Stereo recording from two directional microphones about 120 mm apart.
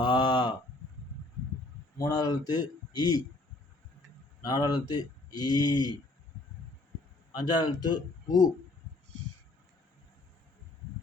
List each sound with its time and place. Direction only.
0.0 s a sound: 40° left (ahead or behind)
2.0 s speech: 35° left (ahead or behind)
4.4 s speech: 35° left (ahead or behind)
7.3 s speech: 40° left (ahead or behind)